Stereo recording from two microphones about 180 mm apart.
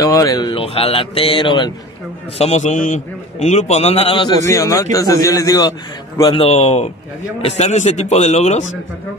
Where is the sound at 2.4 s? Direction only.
40° left (ahead or behind).